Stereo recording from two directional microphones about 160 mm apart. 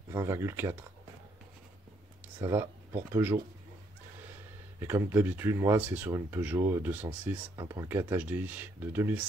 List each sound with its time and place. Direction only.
0.1 s speech: 20° right (ahead or behind)
2.5 s speech: 15° right (ahead or behind)
4.7 s speech: 15° right (ahead or behind)